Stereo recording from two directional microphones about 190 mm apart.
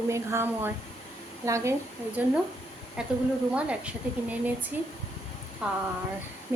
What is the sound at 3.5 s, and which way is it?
Speech, 5° right (ahead or behind).